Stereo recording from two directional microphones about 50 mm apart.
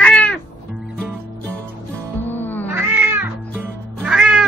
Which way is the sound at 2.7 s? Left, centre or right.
Right.